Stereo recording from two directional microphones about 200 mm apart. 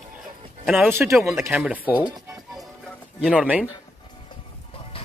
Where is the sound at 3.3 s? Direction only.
5° right (ahead or behind).